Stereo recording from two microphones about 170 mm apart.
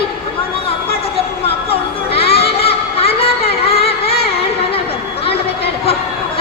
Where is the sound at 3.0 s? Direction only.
35° left (ahead or behind).